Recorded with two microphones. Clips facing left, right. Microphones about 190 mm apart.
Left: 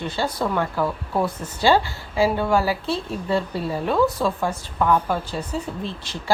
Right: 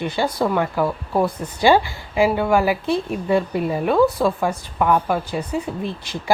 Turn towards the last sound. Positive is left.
turn(degrees=-15)  # may be behind; listen again after turning